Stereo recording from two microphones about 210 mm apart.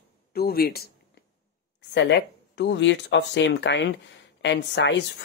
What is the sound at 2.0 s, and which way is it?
Speech, 55° left (ahead or behind).